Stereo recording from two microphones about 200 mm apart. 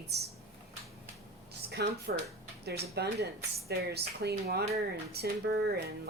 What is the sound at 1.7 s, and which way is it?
Speech, 55° right (ahead or behind).